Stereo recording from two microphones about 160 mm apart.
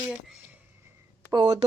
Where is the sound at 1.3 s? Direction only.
25° right (ahead or behind).